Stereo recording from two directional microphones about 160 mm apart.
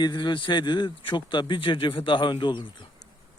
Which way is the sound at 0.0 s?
25° left (ahead or behind).